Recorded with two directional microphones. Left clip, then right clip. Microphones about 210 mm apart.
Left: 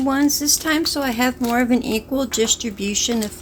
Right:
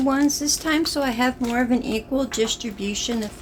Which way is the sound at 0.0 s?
5° left (ahead or behind).